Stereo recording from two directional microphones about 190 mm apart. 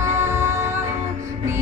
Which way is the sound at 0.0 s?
15° right (ahead or behind).